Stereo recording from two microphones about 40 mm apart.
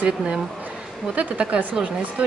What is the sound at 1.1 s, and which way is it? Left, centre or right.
Speech, right.